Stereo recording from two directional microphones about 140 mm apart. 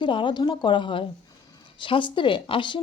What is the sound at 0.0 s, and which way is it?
A woman's voice, 35° left (ahead or behind).